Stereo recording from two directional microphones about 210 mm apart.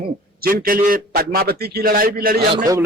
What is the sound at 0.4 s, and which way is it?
A man's voice, 45° right (ahead or behind).